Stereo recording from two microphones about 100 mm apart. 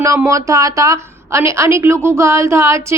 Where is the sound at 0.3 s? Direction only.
35° right (ahead or behind).